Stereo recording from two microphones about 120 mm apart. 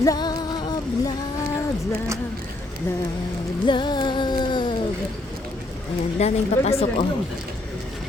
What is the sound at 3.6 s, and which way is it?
Music, 40° left (ahead or behind).